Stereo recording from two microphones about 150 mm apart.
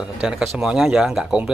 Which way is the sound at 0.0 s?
5° right (ahead or behind).